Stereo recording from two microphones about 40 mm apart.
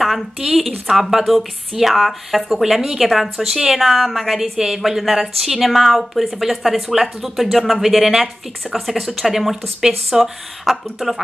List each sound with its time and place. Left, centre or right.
0.4 s a woman's voice: centre
4.4 s a woman's voice: centre